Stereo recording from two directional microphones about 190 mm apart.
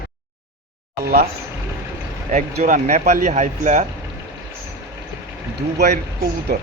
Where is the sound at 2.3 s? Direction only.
40° right (ahead or behind).